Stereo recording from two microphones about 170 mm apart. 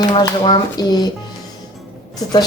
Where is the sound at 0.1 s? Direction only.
25° left (ahead or behind).